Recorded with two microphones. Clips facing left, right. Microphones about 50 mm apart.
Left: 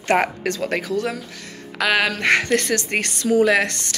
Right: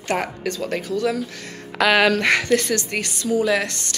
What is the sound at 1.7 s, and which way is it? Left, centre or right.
Speech, centre.